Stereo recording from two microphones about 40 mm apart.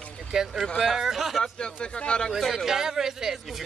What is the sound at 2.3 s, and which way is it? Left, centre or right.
Speech, centre.